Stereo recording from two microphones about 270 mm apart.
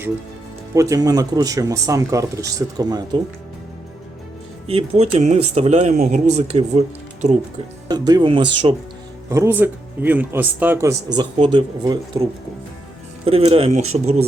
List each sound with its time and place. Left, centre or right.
0.7 s speech: centre
4.6 s speech: right